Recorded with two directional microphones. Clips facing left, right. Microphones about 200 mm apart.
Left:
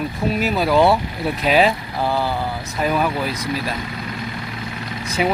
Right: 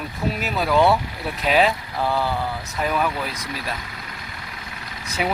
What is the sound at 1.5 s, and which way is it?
Speech, centre (ahead or behind).